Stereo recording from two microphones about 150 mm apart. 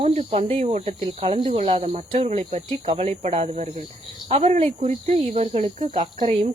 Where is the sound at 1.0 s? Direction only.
35° right (ahead or behind).